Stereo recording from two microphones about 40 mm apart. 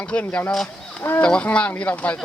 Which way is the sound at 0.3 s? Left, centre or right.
Left.